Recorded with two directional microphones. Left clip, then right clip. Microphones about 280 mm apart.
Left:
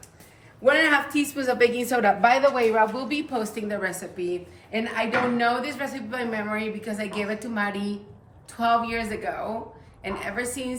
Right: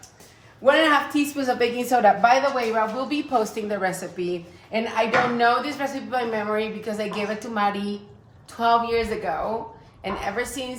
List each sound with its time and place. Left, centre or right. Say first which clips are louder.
0.6 s a woman's voice: right 2 dB; centre